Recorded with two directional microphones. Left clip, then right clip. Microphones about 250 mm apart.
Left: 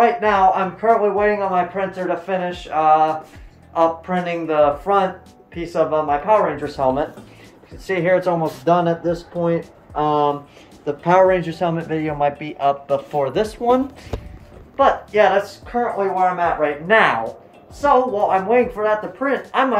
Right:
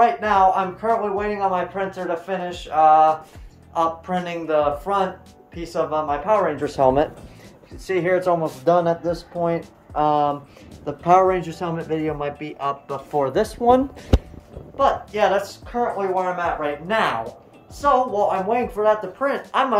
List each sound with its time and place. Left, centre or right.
0.0 s speech: centre
6.6 s speech: right
7.8 s speech: centre
9.3 s speech: centre
9.9 s speech: centre
13.1 s speech: right
14.8 s speech: centre